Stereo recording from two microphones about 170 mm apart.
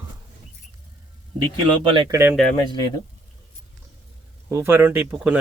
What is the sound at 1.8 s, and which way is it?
Speech, 30° right (ahead or behind).